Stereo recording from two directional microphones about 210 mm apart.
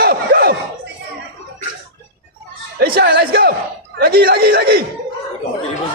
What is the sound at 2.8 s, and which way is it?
Speech, 45° right (ahead or behind).